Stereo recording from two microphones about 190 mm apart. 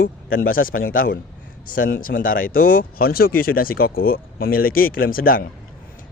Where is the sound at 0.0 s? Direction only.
50° left (ahead or behind).